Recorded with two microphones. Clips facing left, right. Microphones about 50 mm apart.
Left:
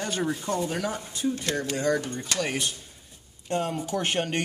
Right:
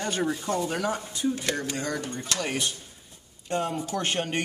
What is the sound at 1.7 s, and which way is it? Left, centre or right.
Speech, centre.